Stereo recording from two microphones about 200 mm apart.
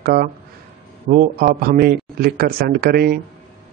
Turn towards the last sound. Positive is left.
turn(degrees=-50)  # may be behind; listen again after turning